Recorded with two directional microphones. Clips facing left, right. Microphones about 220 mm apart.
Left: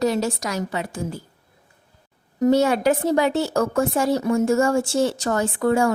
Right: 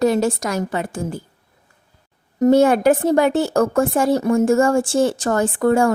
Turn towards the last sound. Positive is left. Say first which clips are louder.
# right 3 dB
turn(degrees=-50)  # may be behind; listen again after turning